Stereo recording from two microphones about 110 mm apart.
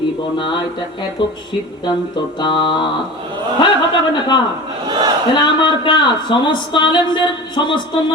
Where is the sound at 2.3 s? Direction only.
45° left (ahead or behind).